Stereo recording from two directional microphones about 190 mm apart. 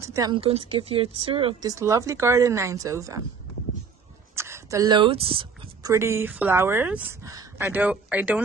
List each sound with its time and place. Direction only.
0.0 s a woman's voice: 15° right (ahead or behind)
4.4 s speech: 15° right (ahead or behind)